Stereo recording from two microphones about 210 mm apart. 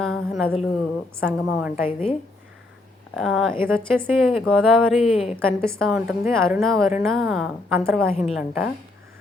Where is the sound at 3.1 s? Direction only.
Centre (ahead or behind).